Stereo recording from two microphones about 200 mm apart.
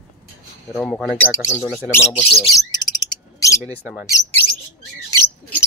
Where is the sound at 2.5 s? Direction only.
20° left (ahead or behind).